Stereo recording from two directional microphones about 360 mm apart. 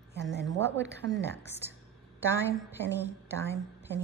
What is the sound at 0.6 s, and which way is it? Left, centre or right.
Speech, right.